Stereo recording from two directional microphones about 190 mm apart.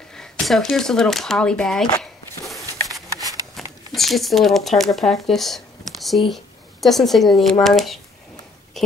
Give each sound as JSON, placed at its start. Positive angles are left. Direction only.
{"t": 0.1, "sound": "speech", "side_deg": 0}
{"t": 2.0, "sound": "walk", "side_deg": 0}
{"t": 3.2, "sound": "shuffling cards", "side_deg": -20}
{"t": 3.9, "sound": "speech", "side_deg": 0}